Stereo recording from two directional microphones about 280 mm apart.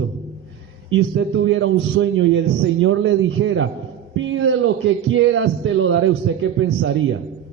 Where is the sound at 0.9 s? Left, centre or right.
Right.